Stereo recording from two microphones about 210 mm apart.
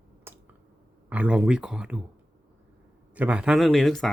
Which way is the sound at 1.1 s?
5° right (ahead or behind).